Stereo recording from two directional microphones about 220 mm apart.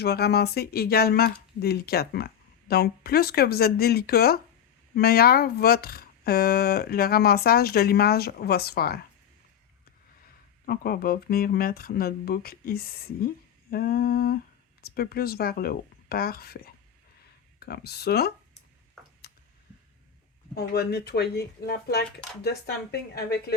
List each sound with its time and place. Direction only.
0.0 s speech: 45° left (ahead or behind)
10.7 s speech: 45° left (ahead or behind)
20.6 s speech: 45° left (ahead or behind)